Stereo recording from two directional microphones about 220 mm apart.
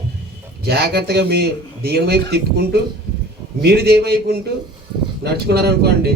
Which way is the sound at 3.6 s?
45° right (ahead or behind).